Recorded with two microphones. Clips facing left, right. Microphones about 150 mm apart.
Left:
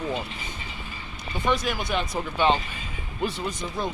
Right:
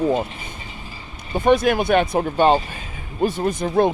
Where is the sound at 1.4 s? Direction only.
50° right (ahead or behind).